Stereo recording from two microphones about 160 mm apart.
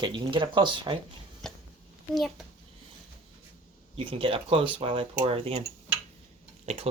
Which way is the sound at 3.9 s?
35° right (ahead or behind).